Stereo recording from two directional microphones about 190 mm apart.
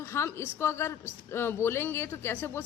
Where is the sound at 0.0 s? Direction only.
15° left (ahead or behind).